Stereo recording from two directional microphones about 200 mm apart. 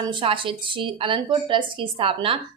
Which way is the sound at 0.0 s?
25° right (ahead or behind).